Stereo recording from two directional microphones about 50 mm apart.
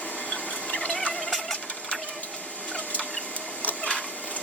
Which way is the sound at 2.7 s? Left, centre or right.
Left.